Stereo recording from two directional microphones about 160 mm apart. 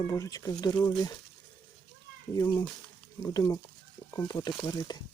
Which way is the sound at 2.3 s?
15° left (ahead or behind).